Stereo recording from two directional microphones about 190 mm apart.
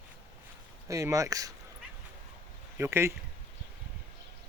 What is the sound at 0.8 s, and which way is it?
Speech, 15° right (ahead or behind).